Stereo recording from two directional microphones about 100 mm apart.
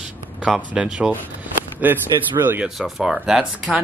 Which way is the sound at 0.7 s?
10° right (ahead or behind).